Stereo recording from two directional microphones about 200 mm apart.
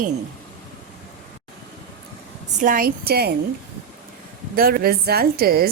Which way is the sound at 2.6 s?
45° right (ahead or behind).